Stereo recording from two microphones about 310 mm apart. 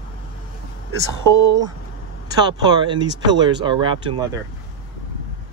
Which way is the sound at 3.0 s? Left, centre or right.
Right.